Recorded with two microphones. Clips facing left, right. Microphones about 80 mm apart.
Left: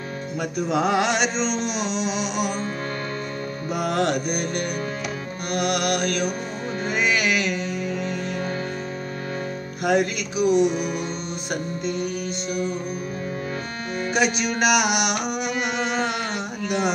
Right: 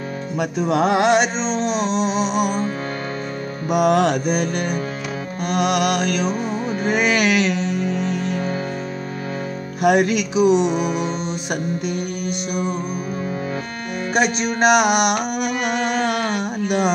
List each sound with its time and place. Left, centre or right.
0.4 s music: right
0.8 s music: right
3.7 s music: right
6.9 s music: right
9.8 s music: right
14.1 s music: right